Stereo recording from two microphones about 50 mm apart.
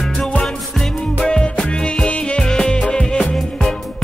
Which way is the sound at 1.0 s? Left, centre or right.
Centre.